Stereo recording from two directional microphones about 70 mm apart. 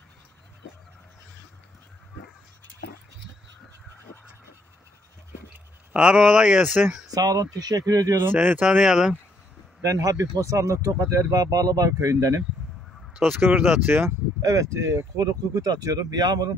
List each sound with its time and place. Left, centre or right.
5.9 s speech: centre
7.1 s speech: right
8.2 s speech: right
8.6 s speech: centre
9.8 s speech: right
13.4 s speech: right
14.4 s speech: right
15.1 s speech: right